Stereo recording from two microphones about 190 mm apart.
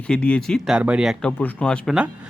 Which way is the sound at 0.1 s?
5° left (ahead or behind).